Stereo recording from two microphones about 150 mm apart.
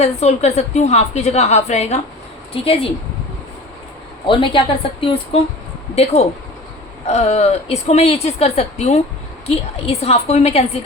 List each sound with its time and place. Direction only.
0.0 s a woman's voice: 45° left (ahead or behind)
4.3 s a woman's voice: 35° left (ahead or behind)